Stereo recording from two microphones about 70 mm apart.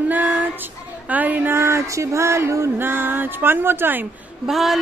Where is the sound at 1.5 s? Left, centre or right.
Right.